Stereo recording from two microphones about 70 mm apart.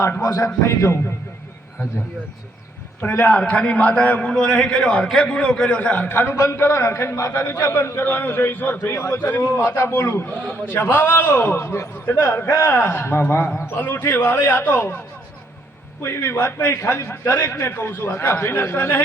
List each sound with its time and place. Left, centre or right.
0.2 s a man's voice: left
3.0 s a man's voice: left
6.1 s a man's voice: left
6.3 s a man's voice: left
6.6 s a man's voice: left
16.0 s a man's voice: left